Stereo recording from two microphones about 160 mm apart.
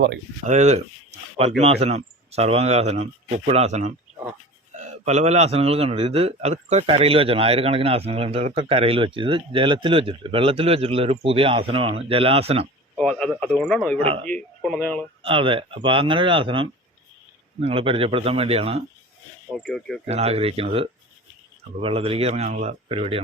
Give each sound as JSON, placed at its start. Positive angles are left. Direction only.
{"t": 0.4, "sound": "a man's voice", "side_deg": -50}
{"t": 13.0, "sound": "speech", "side_deg": 5}
{"t": 14.0, "sound": "a man's voice", "side_deg": -35}
{"t": 14.3, "sound": "speech", "side_deg": 5}
{"t": 15.2, "sound": "a man's voice", "side_deg": -35}
{"t": 19.5, "sound": "speech", "side_deg": 0}
{"t": 20.1, "sound": "a man's voice", "side_deg": -40}